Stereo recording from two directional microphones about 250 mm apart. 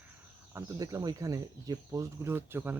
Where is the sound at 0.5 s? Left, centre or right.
Centre.